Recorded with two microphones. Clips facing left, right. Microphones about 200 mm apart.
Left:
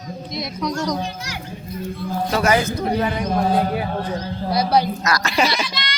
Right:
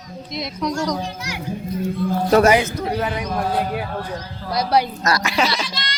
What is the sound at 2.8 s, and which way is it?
Speech, centre (ahead or behind).